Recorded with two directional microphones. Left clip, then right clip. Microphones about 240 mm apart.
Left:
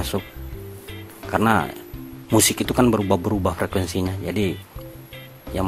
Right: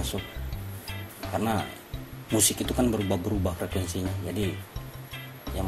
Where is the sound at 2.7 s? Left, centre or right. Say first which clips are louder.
Left 8 dB; centre.